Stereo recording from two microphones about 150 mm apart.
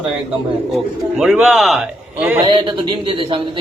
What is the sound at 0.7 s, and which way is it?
Speech, 5° right (ahead or behind).